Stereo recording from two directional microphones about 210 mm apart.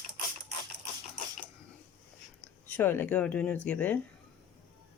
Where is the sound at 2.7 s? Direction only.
10° left (ahead or behind).